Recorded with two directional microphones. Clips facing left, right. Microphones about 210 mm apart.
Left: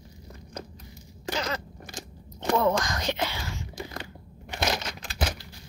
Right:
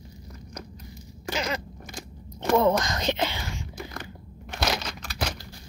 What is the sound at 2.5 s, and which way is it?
Speech, 20° right (ahead or behind).